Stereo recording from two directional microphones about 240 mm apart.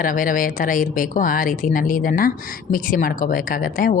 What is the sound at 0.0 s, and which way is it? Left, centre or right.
Speech, left.